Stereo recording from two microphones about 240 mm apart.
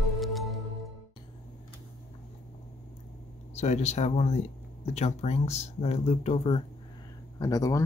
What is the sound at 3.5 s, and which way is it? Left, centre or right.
Speech, left.